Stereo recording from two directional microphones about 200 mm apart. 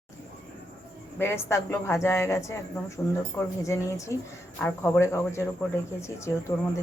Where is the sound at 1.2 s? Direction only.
15° left (ahead or behind).